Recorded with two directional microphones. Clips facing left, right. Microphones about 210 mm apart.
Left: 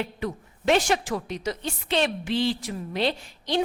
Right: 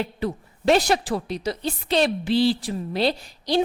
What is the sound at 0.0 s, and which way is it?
A woman's voice, 35° right (ahead or behind).